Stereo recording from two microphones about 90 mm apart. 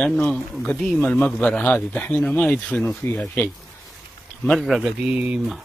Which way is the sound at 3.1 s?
25° left (ahead or behind).